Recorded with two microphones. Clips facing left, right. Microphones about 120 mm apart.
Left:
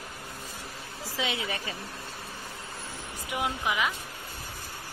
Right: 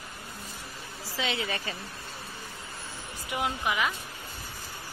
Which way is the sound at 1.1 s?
15° left (ahead or behind).